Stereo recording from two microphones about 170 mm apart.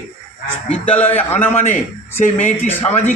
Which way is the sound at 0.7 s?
10° left (ahead or behind).